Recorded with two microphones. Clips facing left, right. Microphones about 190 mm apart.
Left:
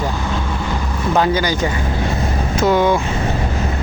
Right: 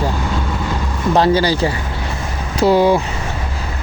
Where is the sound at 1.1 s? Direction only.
35° right (ahead or behind).